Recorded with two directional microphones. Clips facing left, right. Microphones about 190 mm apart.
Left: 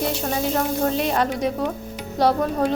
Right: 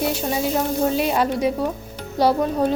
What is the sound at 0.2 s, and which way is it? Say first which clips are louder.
Speech: right 1 dB; 5° right (ahead or behind).